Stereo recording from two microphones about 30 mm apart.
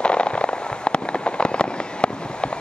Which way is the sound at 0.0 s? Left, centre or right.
Left.